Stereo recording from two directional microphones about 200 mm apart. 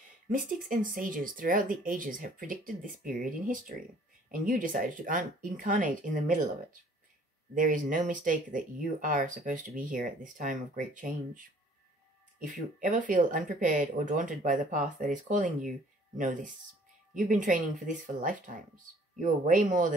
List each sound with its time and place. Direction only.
0.3 s speech: 40° right (ahead or behind)